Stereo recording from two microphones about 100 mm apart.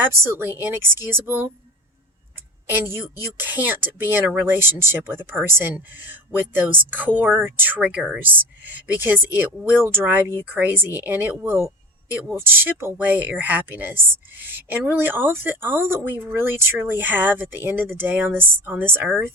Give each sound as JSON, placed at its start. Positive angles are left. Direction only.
{"t": 0.0, "sound": "speech", "side_deg": -25}
{"t": 2.6, "sound": "speech", "side_deg": -20}